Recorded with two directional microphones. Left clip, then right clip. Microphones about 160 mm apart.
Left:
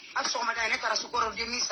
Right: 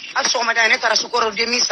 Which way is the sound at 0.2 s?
40° right (ahead or behind).